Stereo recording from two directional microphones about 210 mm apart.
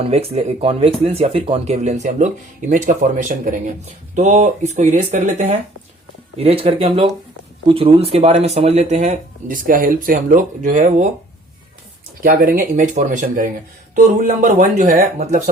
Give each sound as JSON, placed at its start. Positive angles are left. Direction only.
{"t": 0.0, "sound": "speech", "side_deg": -30}
{"t": 12.2, "sound": "speech", "side_deg": -45}